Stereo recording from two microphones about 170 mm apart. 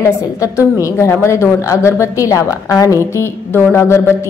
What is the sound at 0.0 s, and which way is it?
A woman's voice, 15° left (ahead or behind).